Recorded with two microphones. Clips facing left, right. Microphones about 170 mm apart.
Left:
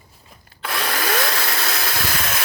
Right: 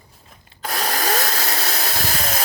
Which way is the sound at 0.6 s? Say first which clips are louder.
Right 1 dB; 40° right (ahead or behind).